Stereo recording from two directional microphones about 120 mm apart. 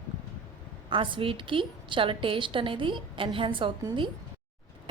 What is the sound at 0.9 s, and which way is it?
A woman's voice, 45° right (ahead or behind).